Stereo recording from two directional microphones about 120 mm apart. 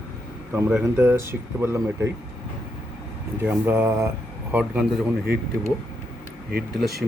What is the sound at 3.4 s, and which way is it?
Speech, 15° right (ahead or behind).